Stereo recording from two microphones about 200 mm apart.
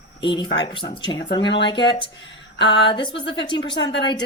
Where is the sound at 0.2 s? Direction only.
25° left (ahead or behind).